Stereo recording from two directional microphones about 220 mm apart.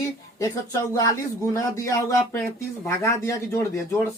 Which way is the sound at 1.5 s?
15° left (ahead or behind).